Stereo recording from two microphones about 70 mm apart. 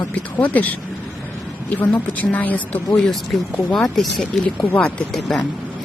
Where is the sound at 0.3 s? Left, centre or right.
Left.